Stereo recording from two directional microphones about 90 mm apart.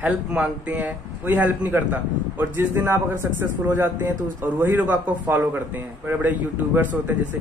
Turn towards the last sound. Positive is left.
turn(degrees=-15)  # may be behind; listen again after turning